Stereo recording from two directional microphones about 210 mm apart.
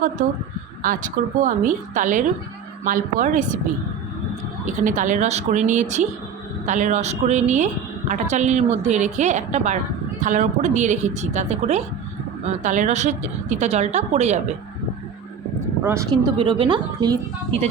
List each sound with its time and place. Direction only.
0.8 s a woman's voice: 40° right (ahead or behind)
4.8 s a woman's voice: 35° right (ahead or behind)
15.8 s speech: 15° right (ahead or behind)